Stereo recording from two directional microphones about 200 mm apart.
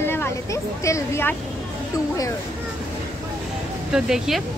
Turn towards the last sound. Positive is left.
turn(degrees=0)  # may be behind; listen again after turning